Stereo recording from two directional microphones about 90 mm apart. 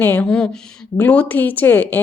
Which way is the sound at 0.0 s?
20° left (ahead or behind).